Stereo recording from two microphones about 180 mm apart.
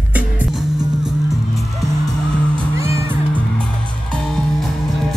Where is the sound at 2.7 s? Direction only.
15° right (ahead or behind).